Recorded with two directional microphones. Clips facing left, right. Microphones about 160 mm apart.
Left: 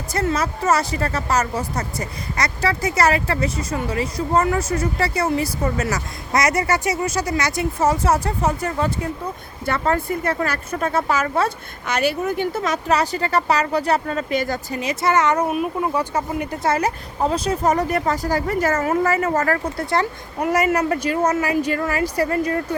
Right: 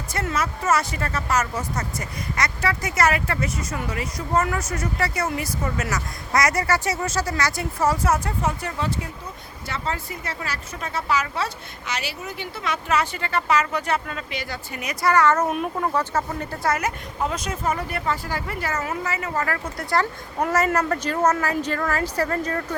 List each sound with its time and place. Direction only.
0.1 s speech: 35° left (ahead or behind)
9.6 s speech: 55° left (ahead or behind)
14.8 s speech: 25° left (ahead or behind)
15.4 s speech: 5° left (ahead or behind)
16.6 s speech: 30° left (ahead or behind)
19.7 s speech: 25° left (ahead or behind)
20.4 s speech: 10° left (ahead or behind)